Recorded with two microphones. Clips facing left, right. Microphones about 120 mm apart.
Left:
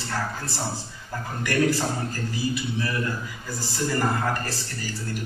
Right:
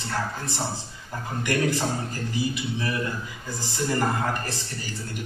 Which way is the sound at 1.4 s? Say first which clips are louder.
Left 2 dB; 20° right (ahead or behind).